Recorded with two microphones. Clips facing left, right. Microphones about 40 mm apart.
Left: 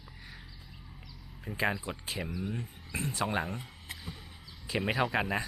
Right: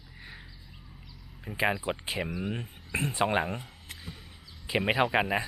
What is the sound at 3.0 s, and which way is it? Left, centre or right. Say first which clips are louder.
Speech: right 5 dB; right.